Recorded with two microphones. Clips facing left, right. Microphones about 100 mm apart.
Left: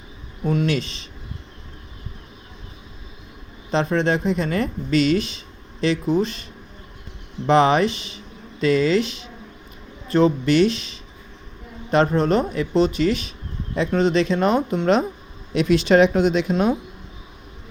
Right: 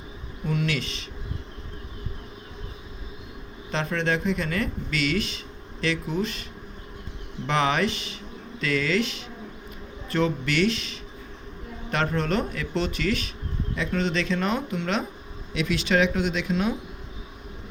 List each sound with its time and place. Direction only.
0.4 s speech: 35° left (ahead or behind)
3.7 s speech: 25° left (ahead or behind)
7.4 s speech: 25° left (ahead or behind)